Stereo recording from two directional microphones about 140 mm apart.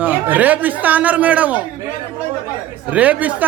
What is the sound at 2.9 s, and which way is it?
Speech, 10° right (ahead or behind).